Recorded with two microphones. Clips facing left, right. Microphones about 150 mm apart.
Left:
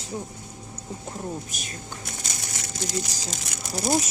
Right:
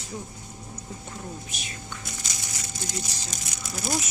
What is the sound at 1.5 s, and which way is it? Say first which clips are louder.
Crumpling: left 1 dB; 50° left (ahead or behind).